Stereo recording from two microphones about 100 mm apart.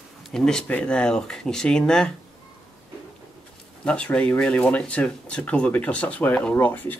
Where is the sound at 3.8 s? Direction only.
10° left (ahead or behind).